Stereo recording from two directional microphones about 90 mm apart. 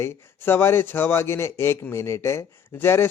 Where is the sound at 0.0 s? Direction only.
25° left (ahead or behind).